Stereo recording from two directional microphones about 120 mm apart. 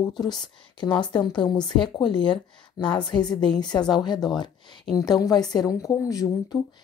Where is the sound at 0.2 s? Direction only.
35° left (ahead or behind).